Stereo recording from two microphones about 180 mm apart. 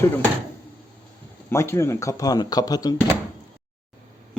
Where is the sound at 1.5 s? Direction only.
15° left (ahead or behind).